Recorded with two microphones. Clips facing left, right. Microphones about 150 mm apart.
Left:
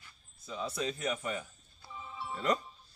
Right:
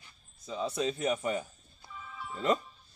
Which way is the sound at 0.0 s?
25° right (ahead or behind).